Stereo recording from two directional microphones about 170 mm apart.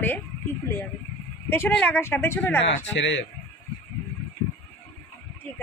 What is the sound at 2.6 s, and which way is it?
Speech, 90° left.